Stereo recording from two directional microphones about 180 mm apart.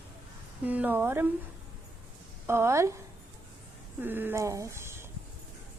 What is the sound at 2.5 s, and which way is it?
Speech, 15° right (ahead or behind).